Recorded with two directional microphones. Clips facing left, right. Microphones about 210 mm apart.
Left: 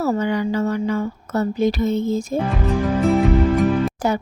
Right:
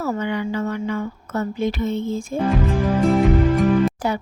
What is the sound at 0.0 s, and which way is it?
Speech, 40° left (ahead or behind).